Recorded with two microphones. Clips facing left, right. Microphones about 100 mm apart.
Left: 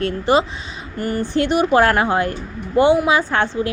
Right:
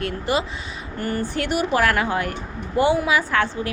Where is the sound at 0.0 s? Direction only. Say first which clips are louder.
Left 6 dB; 30° left (ahead or behind).